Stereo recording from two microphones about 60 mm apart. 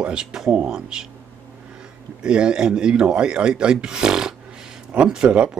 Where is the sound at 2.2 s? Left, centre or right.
Centre.